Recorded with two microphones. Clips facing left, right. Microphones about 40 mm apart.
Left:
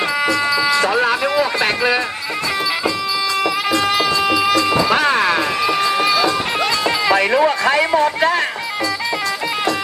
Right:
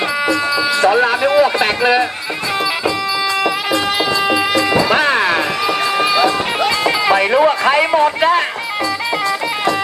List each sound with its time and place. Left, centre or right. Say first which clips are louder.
0.3 s a sound: even; centre
3.4 s music: right 1 dB; right
5.4 s music: even; right
7.2 s speech: right 2 dB; centre